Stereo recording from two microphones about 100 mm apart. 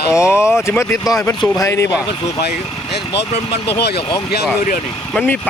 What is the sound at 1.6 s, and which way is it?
Speech, 30° left (ahead or behind).